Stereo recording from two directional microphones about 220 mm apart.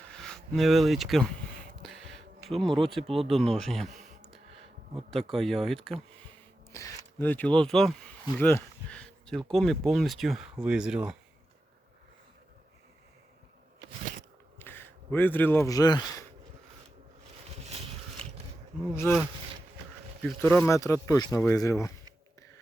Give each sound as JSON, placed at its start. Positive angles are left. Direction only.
{"t": 0.1, "sound": "speech", "side_deg": 5}
{"t": 1.8, "sound": "a sound", "side_deg": 0}
{"t": 2.5, "sound": "speech", "side_deg": 0}
{"t": 5.1, "sound": "speech", "side_deg": 0}
{"t": 6.7, "sound": "speech", "side_deg": 15}
{"t": 14.6, "sound": "a sound", "side_deg": 10}
{"t": 17.7, "sound": "a sound", "side_deg": -25}
{"t": 18.9, "sound": "speech", "side_deg": 10}
{"t": 20.2, "sound": "speech", "side_deg": 5}